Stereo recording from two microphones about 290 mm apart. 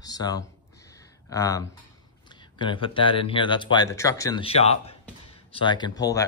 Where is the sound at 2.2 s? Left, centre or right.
Centre.